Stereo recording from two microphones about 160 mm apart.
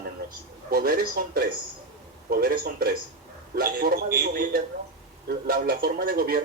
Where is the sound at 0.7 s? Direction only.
70° right (ahead or behind).